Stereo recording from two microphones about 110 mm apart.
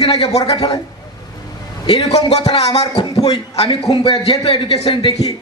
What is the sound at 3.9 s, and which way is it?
Speech, 50° left (ahead or behind).